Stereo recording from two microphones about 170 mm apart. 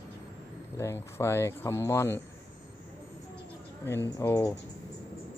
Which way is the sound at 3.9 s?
15° left (ahead or behind).